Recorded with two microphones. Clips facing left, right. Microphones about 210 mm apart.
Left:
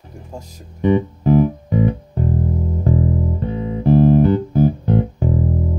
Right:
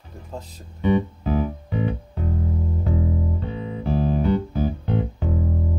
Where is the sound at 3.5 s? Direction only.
50° left (ahead or behind).